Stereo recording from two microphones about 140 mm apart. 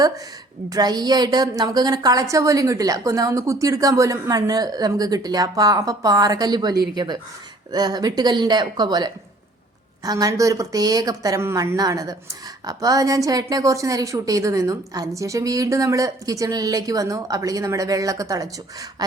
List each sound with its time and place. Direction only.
0.7 s a woman's voice: 30° right (ahead or behind)